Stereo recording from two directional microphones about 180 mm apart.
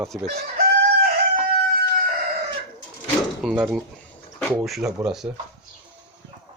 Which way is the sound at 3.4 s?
5° right (ahead or behind).